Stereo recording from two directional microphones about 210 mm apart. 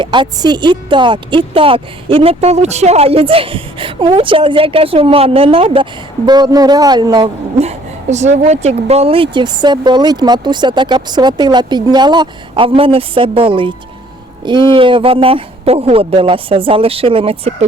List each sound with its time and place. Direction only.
0.0 s speech: 20° right (ahead or behind)